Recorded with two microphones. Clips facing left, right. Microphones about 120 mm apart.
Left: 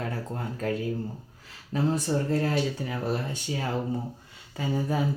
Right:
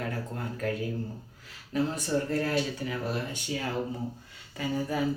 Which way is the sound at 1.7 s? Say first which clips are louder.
Left 2 dB; 30° left (ahead or behind).